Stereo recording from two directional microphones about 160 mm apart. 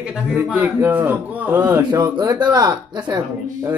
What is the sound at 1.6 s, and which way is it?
A man's voice, 25° right (ahead or behind).